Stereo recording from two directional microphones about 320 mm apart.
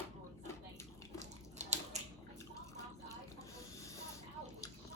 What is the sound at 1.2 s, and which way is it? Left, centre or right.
Typewriter, right.